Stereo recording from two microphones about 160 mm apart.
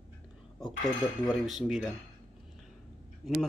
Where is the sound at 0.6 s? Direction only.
25° left (ahead or behind).